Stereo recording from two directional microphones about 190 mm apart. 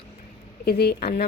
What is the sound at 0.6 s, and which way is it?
Speech, 60° left (ahead or behind).